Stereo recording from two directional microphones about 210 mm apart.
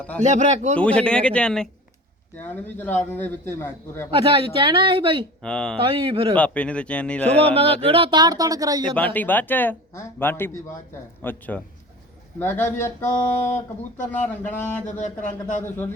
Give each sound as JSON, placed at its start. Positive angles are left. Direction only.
{"t": 0.2, "sound": "a man's voice", "side_deg": -35}
{"t": 0.8, "sound": "speech", "side_deg": 5}
{"t": 4.1, "sound": "speech", "side_deg": -25}
{"t": 5.4, "sound": "speech", "side_deg": 5}
{"t": 5.7, "sound": "speech", "side_deg": -25}
{"t": 6.3, "sound": "speech", "side_deg": 5}
{"t": 7.5, "sound": "speech", "side_deg": -30}
{"t": 9.0, "sound": "speech", "side_deg": 10}
{"t": 13.1, "sound": "a man's voice", "side_deg": 35}
{"t": 14.1, "sound": "speech", "side_deg": 10}
{"t": 14.8, "sound": "a man's voice", "side_deg": 35}
{"t": 15.6, "sound": "speech", "side_deg": 10}